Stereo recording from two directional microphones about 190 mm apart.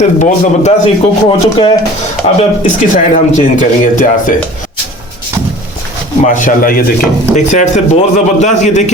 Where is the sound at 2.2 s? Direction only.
40° left (ahead or behind).